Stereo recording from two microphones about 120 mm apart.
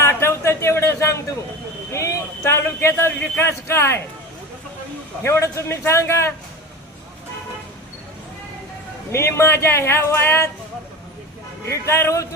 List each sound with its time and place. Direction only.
0.0 s a sound: 20° left (ahead or behind)
3.2 s speech: 20° left (ahead or behind)
5.2 s speech: 25° left (ahead or behind)
9.1 s speech: 20° left (ahead or behind)
11.7 s speech: 20° left (ahead or behind)